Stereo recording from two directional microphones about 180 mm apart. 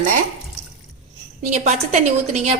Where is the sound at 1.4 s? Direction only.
40° right (ahead or behind).